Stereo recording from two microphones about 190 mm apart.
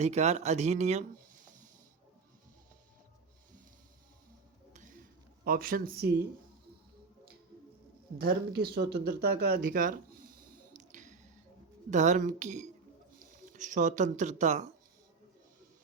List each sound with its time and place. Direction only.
0.0 s speech: 35° right (ahead or behind)
4.7 s a sound: 40° right (ahead or behind)
5.5 s speech: 45° right (ahead or behind)
8.2 s speech: 55° right (ahead or behind)
10.8 s squish: 40° right (ahead or behind)
11.9 s speech: 40° right (ahead or behind)